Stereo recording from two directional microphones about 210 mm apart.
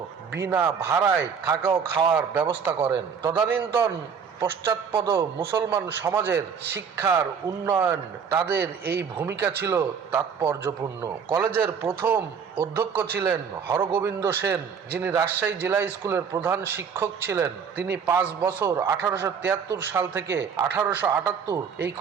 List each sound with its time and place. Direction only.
0.3 s a man's voice: 15° right (ahead or behind)
2.9 s a man's voice: 20° right (ahead or behind)
8.5 s a man's voice: 50° right (ahead or behind)
9.6 s a man's voice: 10° right (ahead or behind)